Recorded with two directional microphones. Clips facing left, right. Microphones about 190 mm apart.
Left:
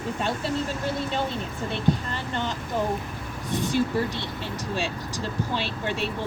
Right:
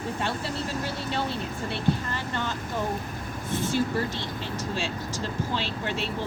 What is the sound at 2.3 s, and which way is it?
Speech, 20° left (ahead or behind).